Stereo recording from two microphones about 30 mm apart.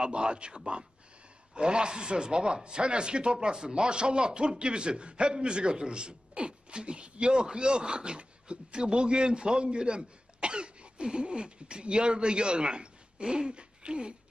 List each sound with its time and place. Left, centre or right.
0.0 s speech: right